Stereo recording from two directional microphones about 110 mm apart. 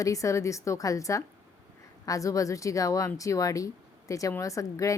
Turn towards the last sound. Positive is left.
turn(degrees=30)  # may be behind; listen again after turning